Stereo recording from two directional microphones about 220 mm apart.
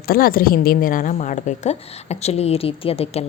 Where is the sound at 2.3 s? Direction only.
30° left (ahead or behind).